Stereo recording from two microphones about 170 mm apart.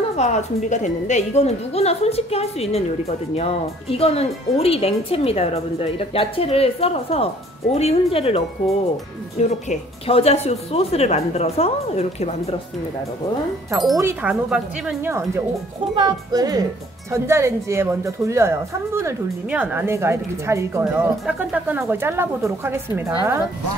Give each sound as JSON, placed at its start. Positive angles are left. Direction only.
{"t": 0.1, "sound": "speech", "side_deg": 40}
{"t": 9.4, "sound": "speech", "side_deg": 40}
{"t": 13.9, "sound": "a woman's voice", "side_deg": -10}
{"t": 16.0, "sound": "a woman's voice", "side_deg": -20}